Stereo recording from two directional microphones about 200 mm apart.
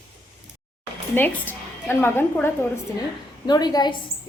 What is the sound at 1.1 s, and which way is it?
A woman's voice, 10° left (ahead or behind).